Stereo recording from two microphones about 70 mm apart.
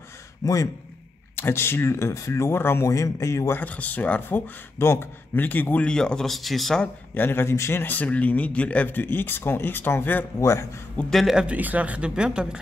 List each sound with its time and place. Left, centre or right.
0.4 s a man's voice: left
1.3 s speech: left
2.9 s speech: left
3.5 s speech: left
4.7 s speech: left
5.9 s speech: centre
7.2 s speech: left
7.8 s speech: left
10.4 s speech: left
11.1 s speech: centre
11.3 s speech: centre